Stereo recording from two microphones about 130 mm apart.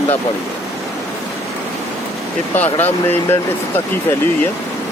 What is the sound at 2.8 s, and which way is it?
Speech, 15° left (ahead or behind).